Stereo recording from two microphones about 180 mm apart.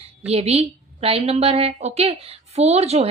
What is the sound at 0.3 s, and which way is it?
Speech, 35° right (ahead or behind).